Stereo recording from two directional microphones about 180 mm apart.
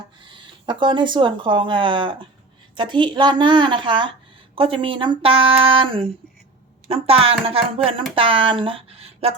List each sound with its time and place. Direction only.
0.3 s speech: 25° right (ahead or behind)